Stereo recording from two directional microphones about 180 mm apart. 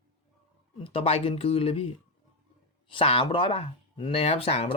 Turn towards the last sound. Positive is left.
turn(degrees=35)  # may be behind; listen again after turning